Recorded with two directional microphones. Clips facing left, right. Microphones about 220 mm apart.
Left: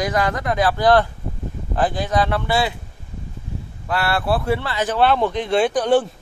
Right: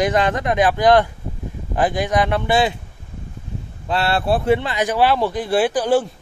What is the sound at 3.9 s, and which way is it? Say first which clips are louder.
Speech: right 2 dB; 25° right (ahead or behind).